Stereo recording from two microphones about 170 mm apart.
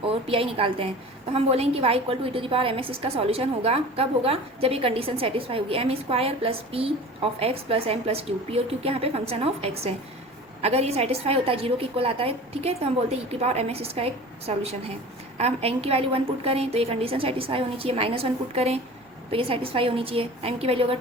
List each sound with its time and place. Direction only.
0.1 s a woman's voice: 35° right (ahead or behind)